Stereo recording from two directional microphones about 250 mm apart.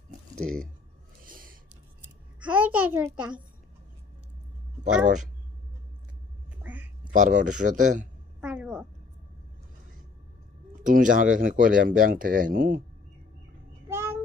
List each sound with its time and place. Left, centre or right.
1.2 s a sound: right
2.4 s a child's voice: centre
5.0 s speech: right
6.6 s quack: centre
7.1 s speech: right
8.4 s a sound: centre
10.8 s speech: right
13.8 s child singing: centre